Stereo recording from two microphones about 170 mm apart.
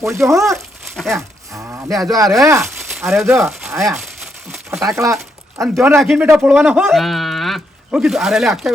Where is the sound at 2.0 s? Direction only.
20° right (ahead or behind).